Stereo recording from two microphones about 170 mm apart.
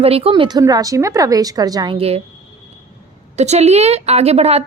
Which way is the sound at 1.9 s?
35° right (ahead or behind).